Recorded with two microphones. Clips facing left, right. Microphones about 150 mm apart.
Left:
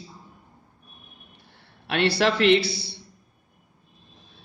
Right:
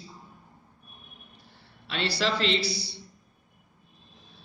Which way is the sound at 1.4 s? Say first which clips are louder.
Left 1 dB; 60° left (ahead or behind).